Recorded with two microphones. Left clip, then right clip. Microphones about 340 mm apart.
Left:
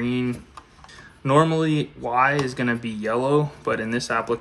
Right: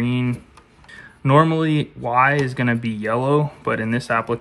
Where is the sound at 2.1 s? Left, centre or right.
Centre.